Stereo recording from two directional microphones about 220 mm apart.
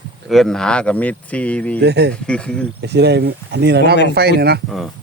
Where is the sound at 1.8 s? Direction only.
50° right (ahead or behind).